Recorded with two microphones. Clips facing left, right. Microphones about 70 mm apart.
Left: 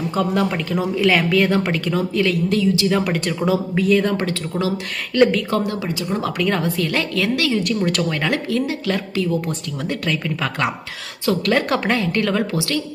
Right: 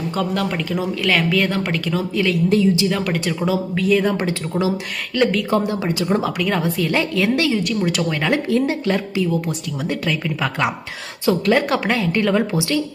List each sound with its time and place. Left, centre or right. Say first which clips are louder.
0.1 s speech: left 2 dB; centre
2.5 s speech: right 2 dB; right
2.8 s a woman's voice: left 1 dB; centre
5.1 s speech: left 3 dB; centre
5.5 s speech: right 2 dB; centre
5.9 s speech: right 4 dB; right
6.2 s a woman's voice: even; centre; by 7.5 s right
7.5 s speech: even; centre
8.3 s speech: right 3 dB; right
8.9 s a woman's voice: right 1 dB; centre
12.4 s speech: right 2 dB; centre